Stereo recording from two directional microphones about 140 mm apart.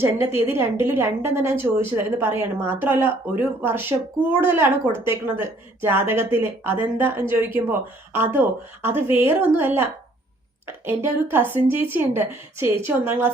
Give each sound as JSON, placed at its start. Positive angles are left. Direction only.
{"t": 0.0, "sound": "a woman's voice", "side_deg": -15}